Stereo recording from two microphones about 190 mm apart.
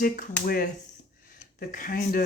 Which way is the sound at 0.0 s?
50° left (ahead or behind).